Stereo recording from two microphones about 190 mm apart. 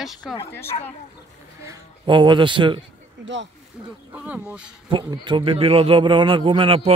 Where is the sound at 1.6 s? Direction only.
20° right (ahead or behind).